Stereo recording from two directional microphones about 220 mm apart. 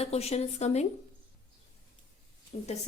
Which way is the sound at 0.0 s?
30° left (ahead or behind).